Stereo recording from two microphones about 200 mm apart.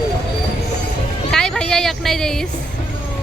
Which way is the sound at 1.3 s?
5° left (ahead or behind).